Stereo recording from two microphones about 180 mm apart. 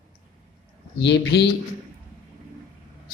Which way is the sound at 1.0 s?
75° left (ahead or behind).